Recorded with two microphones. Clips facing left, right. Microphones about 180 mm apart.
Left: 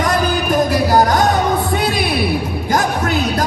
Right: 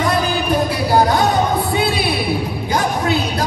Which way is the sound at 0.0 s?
45° left (ahead or behind).